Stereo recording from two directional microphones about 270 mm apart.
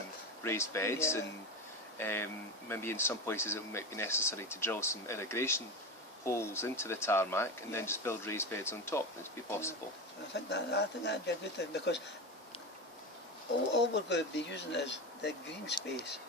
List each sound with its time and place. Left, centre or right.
0.4 s speech: centre
10.3 s speech: left
13.7 s speech: left